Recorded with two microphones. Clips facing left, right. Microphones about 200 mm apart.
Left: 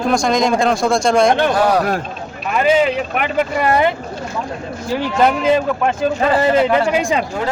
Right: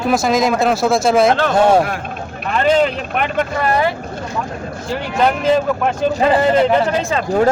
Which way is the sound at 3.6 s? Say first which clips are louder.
Left 2 dB; 20° left (ahead or behind).